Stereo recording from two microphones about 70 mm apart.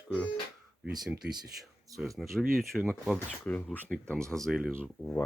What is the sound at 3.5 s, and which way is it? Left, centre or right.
Speech, left.